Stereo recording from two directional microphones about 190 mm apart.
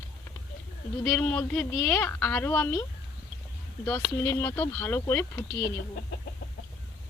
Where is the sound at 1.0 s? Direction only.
10° left (ahead or behind).